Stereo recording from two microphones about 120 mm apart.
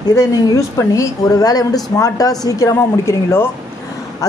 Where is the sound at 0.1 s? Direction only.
30° left (ahead or behind).